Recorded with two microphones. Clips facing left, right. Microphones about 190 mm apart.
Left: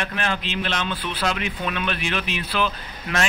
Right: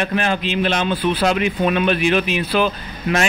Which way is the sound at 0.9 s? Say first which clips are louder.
Right 10 dB; 40° right (ahead or behind).